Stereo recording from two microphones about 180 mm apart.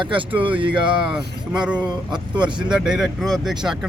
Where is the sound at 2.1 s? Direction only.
25° right (ahead or behind).